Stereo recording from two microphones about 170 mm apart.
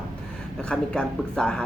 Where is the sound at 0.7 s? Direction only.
5° left (ahead or behind).